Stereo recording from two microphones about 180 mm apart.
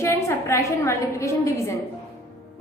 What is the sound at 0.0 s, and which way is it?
A woman's voice, 15° left (ahead or behind).